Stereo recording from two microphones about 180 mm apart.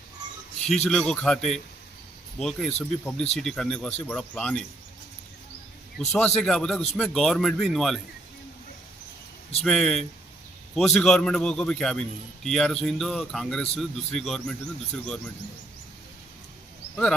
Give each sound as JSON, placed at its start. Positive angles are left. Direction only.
{"t": 0.9, "sound": "a man's voice", "side_deg": 5}
{"t": 6.1, "sound": "a man's voice", "side_deg": 5}
{"t": 9.6, "sound": "a man's voice", "side_deg": 5}